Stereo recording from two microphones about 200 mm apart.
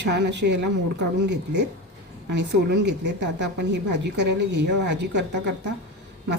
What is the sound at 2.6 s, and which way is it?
Speech, 60° right (ahead or behind).